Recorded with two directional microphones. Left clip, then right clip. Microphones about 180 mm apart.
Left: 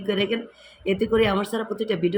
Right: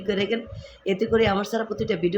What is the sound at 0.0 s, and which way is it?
Speech, 5° right (ahead or behind).